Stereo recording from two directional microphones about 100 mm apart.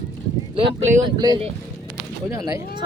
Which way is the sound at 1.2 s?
40° right (ahead or behind).